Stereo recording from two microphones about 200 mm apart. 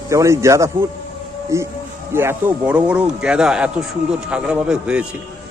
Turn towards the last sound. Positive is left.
turn(degrees=-5)  # may be behind; listen again after turning